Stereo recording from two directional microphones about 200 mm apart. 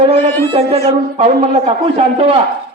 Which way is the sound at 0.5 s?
30° right (ahead or behind).